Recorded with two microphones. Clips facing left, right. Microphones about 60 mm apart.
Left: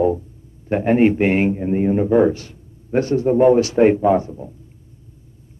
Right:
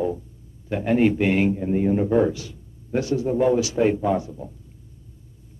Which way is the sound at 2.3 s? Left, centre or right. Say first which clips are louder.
Even; left.